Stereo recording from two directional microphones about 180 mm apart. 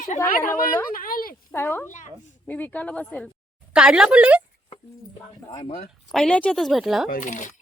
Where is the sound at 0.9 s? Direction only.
55° left (ahead or behind).